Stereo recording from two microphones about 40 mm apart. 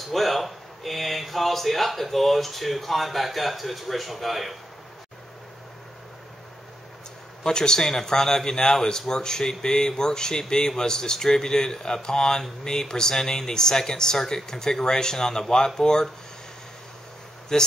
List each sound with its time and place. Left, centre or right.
0.1 s speech: centre
7.4 s speech: centre
17.5 s speech: centre